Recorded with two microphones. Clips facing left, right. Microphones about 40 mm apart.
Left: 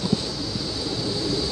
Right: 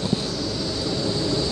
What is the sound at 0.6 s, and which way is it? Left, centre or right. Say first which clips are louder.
Vehicle: right 3 dB; centre.